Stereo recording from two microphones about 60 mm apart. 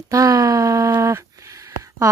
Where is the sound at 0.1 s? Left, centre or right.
Right.